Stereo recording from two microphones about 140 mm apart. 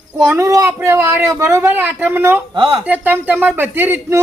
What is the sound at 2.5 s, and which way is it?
Speech, 40° right (ahead or behind).